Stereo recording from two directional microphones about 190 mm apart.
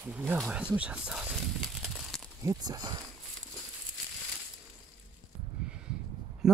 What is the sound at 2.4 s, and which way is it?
Speech, 20° right (ahead or behind).